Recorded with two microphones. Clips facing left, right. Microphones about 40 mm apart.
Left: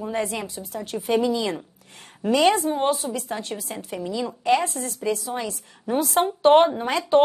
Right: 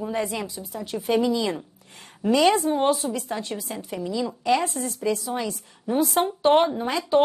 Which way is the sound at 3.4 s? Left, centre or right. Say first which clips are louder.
Even; left.